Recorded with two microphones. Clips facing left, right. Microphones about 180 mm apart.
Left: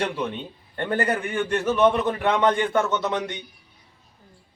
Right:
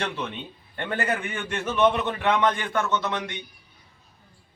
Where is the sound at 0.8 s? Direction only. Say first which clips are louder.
Left 4 dB; 35° left (ahead or behind).